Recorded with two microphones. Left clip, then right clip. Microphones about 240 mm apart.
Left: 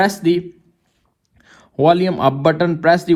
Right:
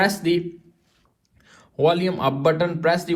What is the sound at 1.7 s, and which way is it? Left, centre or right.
A man's voice, left.